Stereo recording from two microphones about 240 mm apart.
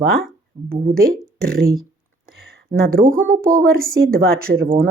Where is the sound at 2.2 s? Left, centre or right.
Right.